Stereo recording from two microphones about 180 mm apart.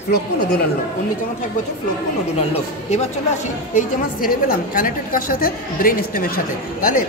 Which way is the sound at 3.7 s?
50° left (ahead or behind).